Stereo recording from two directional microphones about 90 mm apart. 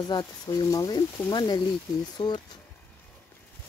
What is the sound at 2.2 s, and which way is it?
Speech, 65° left (ahead or behind).